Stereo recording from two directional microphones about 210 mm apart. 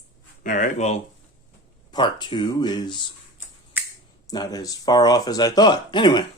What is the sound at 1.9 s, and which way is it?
Speech, 20° left (ahead or behind).